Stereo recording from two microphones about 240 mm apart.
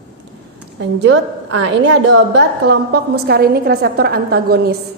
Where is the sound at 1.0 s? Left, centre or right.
Right.